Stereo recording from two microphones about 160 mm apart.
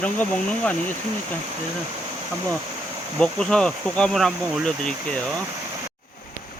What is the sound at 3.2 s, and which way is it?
Speech, 5° left (ahead or behind).